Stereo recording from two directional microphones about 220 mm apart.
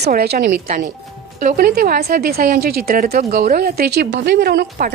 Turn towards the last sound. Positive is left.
turn(degrees=-40)  # may be behind; listen again after turning